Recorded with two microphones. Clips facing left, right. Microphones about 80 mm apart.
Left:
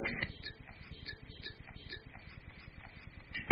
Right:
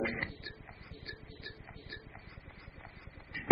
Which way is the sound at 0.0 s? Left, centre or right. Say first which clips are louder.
Right 4 dB; right.